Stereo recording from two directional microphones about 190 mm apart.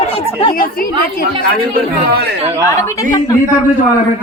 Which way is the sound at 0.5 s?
50° left (ahead or behind).